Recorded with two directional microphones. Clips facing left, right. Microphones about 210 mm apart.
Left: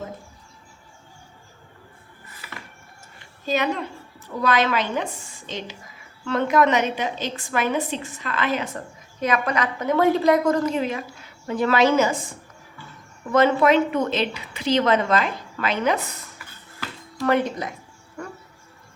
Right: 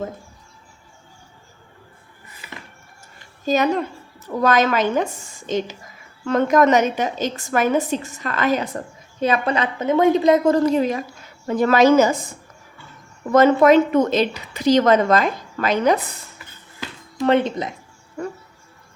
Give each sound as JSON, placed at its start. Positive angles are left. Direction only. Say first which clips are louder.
{"t": 3.4, "sound": "a woman's voice", "louder": "right 5 dB", "side_deg": -40}
{"t": 9.2, "sound": "a woman's voice", "louder": "right 3 dB", "side_deg": -30}
{"t": 13.3, "sound": "a woman's voice", "louder": "right 5 dB", "side_deg": -40}
{"t": 16.8, "sound": "music", "louder": "right 4 dB", "side_deg": -20}